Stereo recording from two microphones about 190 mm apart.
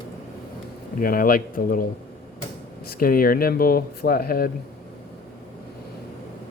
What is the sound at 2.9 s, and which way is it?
Speech, 50° left (ahead or behind).